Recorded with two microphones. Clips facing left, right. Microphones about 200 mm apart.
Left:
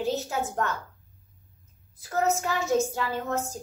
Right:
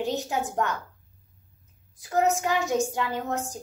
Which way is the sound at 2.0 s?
15° right (ahead or behind).